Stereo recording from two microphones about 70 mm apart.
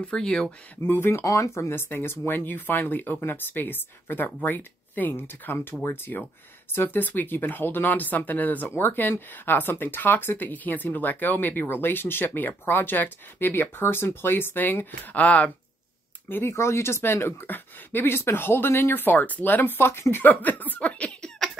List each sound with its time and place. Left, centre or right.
0.0 s speech: centre
0.8 s speech: left
1.2 s speech: left
1.8 s speech: left
16.3 s speech: left; by 21.3 s centre